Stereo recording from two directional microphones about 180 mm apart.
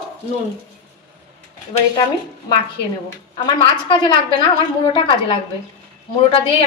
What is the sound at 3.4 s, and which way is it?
A woman's voice, 25° left (ahead or behind).